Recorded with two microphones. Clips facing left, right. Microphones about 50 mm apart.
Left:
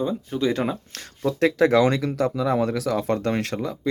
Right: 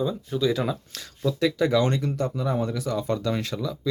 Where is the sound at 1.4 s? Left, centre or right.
Left.